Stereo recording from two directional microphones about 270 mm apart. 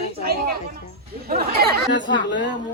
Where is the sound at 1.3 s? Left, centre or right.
Right.